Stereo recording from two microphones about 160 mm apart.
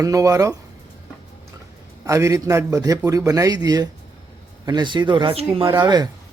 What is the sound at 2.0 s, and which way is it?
A man's voice, 20° right (ahead or behind).